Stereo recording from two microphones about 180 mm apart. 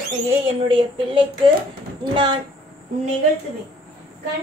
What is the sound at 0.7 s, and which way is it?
Speech, 30° right (ahead or behind).